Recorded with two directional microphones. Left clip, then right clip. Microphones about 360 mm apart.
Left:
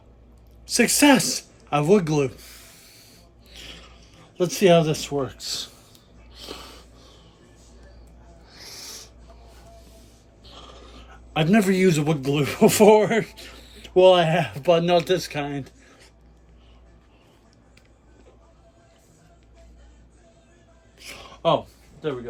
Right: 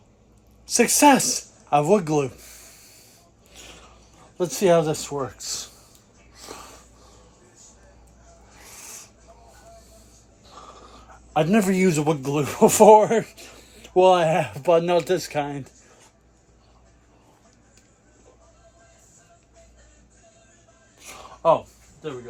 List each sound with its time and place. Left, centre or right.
0.6 s speech: centre
3.5 s mechanisms: centre
4.4 s speech: centre
6.3 s a sound: centre
10.4 s speech: centre